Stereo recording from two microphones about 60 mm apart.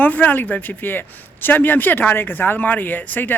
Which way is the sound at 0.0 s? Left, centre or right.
Left.